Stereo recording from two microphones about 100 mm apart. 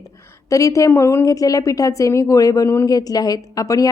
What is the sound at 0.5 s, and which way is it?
A woman's voice, 35° left (ahead or behind).